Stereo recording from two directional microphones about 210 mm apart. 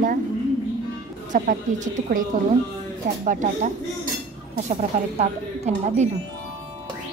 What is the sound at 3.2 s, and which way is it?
Speech, 35° right (ahead or behind).